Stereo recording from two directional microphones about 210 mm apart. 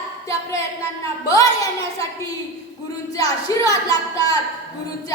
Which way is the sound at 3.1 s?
15° left (ahead or behind).